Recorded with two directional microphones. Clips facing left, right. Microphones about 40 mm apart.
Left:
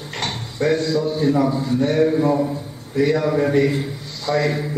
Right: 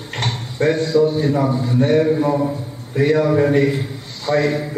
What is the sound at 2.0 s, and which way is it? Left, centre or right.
Speech, centre.